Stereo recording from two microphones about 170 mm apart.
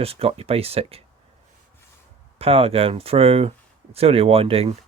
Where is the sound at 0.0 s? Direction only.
35° right (ahead or behind).